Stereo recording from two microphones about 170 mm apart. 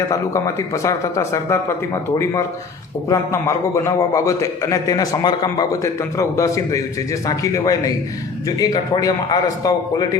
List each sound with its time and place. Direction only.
0.1 s a man's voice: 20° left (ahead or behind)
3.1 s a man's voice: 15° left (ahead or behind)